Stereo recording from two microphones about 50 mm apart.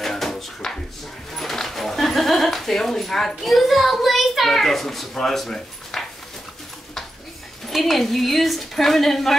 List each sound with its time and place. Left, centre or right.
0.0 s a sound: centre
1.3 s speech: centre
7.7 s speech: centre